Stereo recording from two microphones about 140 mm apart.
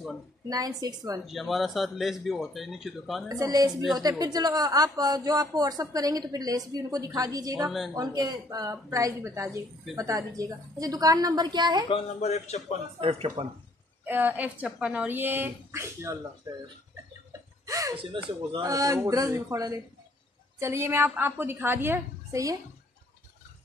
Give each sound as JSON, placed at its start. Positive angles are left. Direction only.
{"t": 0.5, "sound": "speech", "side_deg": -25}
{"t": 1.2, "sound": "speech", "side_deg": 0}
{"t": 3.3, "sound": "speech", "side_deg": -25}
{"t": 7.6, "sound": "speech", "side_deg": 0}
{"t": 7.9, "sound": "speech", "side_deg": -25}
{"t": 11.9, "sound": "speech", "side_deg": 50}
{"t": 13.0, "sound": "speech", "side_deg": -45}
{"t": 14.0, "sound": "speech", "side_deg": -15}
{"t": 17.3, "sound": "a sound", "side_deg": -25}
{"t": 17.9, "sound": "speech", "side_deg": -35}